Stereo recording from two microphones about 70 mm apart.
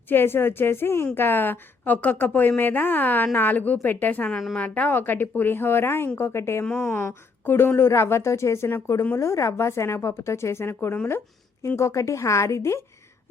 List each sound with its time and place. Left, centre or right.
0.1 s a woman's voice: left
6.7 s a woman's voice: centre
7.0 s a woman's voice: left
11.8 s a woman's voice: left